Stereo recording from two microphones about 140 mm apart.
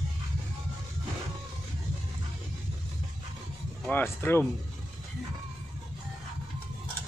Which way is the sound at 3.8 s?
15° left (ahead or behind).